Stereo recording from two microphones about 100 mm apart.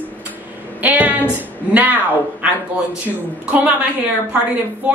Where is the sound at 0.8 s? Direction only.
15° right (ahead or behind).